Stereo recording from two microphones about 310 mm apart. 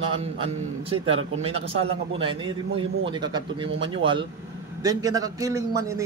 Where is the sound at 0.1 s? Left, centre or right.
Centre.